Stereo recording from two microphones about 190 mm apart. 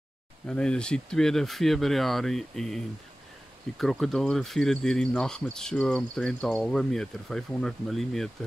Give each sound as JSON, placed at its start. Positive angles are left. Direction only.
{"t": 0.5, "sound": "speech", "side_deg": 5}